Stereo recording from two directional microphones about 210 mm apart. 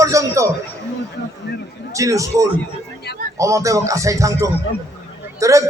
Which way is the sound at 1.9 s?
15° right (ahead or behind).